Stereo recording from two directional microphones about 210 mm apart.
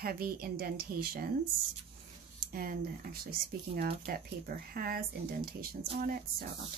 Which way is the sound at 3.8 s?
50° right (ahead or behind).